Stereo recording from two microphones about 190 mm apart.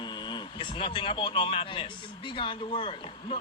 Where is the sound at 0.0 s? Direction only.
25° left (ahead or behind).